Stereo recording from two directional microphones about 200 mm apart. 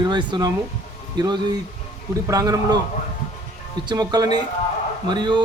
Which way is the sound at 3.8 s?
20° right (ahead or behind).